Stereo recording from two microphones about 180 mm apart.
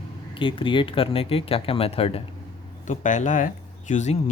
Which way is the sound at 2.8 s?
45° left (ahead or behind).